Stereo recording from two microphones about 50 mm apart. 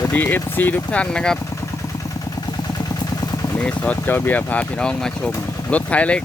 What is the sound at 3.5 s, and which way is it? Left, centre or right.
Speech, left.